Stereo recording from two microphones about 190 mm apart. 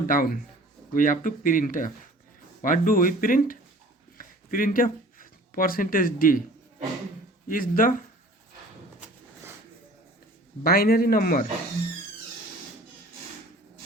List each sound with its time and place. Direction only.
0.1 s speech: 45° left (ahead or behind)
4.2 s a sound: 45° left (ahead or behind)
7.4 s speech: 45° left (ahead or behind)
10.6 s speech: 50° left (ahead or behind)